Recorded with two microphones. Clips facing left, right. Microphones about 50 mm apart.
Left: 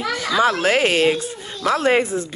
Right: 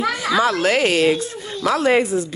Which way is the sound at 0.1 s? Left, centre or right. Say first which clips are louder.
Right 1 dB; centre.